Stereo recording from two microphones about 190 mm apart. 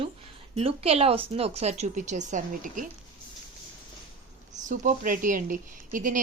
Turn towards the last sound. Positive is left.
turn(degrees=-45)  # may be behind; listen again after turning